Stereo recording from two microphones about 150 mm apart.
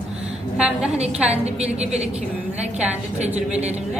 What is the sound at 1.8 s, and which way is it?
Speech, 45° right (ahead or behind).